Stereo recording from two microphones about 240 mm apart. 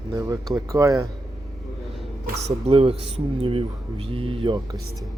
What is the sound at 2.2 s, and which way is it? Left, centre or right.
Speech, right.